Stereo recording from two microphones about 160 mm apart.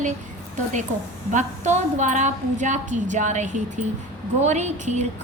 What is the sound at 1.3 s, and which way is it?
A woman's voice, 50° right (ahead or behind).